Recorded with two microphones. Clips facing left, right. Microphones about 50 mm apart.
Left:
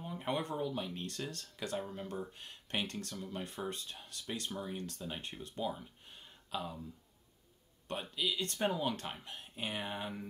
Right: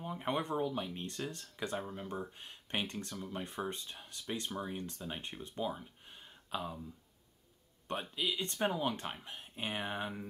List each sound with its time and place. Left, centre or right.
0.0 s speech: right
7.9 s speech: right